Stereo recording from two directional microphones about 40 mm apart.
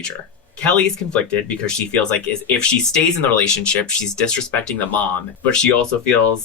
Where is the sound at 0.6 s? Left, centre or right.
Left.